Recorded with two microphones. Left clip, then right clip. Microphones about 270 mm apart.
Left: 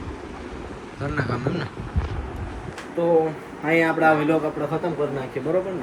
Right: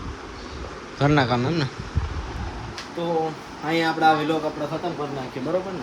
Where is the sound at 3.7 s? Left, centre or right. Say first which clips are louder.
Left 1 dB; centre.